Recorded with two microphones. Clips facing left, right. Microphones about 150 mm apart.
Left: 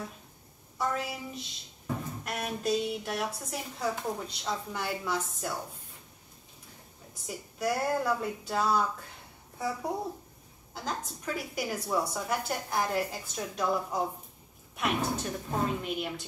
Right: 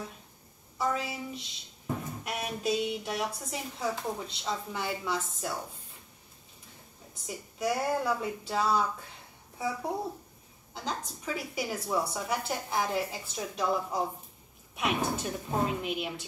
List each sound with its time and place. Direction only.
0.7 s a woman's voice: centre (ahead or behind)
7.2 s a woman's voice: centre (ahead or behind)